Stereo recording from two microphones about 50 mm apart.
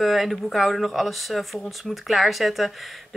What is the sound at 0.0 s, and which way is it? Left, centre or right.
Speech, centre.